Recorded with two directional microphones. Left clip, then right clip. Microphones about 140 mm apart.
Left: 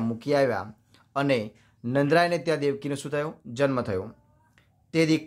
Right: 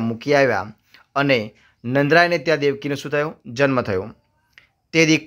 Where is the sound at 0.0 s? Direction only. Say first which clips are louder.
Right 7 dB; 20° right (ahead or behind).